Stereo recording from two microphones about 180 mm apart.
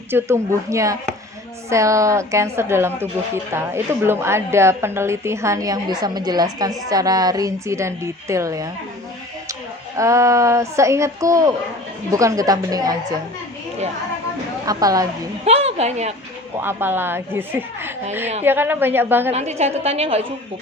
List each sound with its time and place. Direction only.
0.1 s a woman's voice: 15° right (ahead or behind)
10.0 s a woman's voice: 15° right (ahead or behind)
14.7 s a woman's voice: 20° right (ahead or behind)
15.4 s a woman's voice: 35° right (ahead or behind)
16.6 s a woman's voice: 10° right (ahead or behind)
19.3 s a woman's voice: 35° right (ahead or behind)